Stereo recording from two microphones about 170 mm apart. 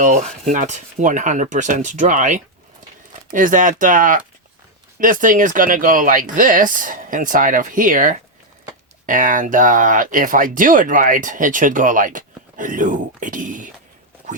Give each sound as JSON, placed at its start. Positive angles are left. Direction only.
{"t": 0.0, "sound": "speech", "side_deg": -45}